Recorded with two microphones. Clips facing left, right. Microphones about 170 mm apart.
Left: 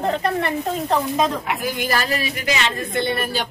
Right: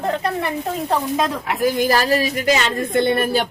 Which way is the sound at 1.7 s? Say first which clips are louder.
Right 6 dB; 35° right (ahead or behind).